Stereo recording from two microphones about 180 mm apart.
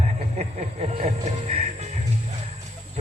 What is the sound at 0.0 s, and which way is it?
Music, 35° right (ahead or behind).